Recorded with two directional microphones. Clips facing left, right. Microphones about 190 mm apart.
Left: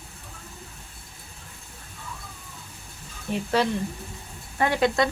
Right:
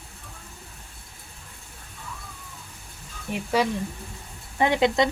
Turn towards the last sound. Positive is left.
turn(degrees=-20)  # may be behind; listen again after turning